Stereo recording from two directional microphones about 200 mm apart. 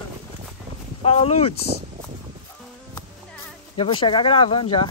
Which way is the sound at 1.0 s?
30° left (ahead or behind).